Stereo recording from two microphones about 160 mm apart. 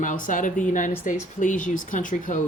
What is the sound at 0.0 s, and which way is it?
Speech, 55° left (ahead or behind).